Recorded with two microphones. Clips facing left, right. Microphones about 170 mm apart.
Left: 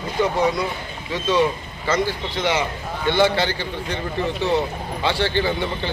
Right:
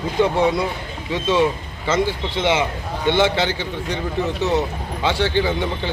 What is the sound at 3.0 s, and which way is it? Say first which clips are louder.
Speech: right 1 dB; 20° right (ahead or behind).